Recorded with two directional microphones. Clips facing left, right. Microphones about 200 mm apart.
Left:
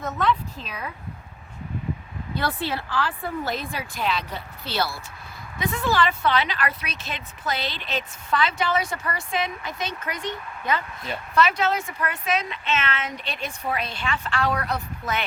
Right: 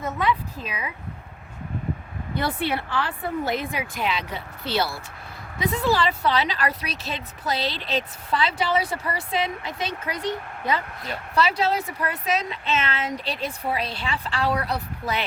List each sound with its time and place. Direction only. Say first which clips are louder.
0.0 s speech: even; 10° right (ahead or behind)
2.6 s speech: right 3 dB; 65° right (ahead or behind)
2.9 s speech: right 1 dB; 20° right (ahead or behind)